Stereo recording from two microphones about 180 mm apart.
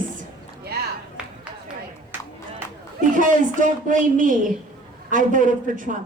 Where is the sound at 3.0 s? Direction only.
45° right (ahead or behind).